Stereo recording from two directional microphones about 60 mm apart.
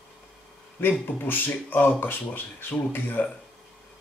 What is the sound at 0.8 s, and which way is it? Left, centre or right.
Speech, left.